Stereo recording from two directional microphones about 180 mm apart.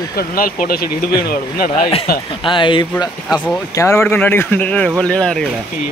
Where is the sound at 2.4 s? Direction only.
25° left (ahead or behind).